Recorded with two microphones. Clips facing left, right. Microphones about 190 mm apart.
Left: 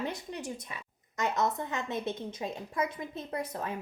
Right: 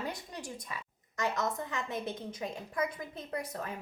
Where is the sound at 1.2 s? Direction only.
25° left (ahead or behind).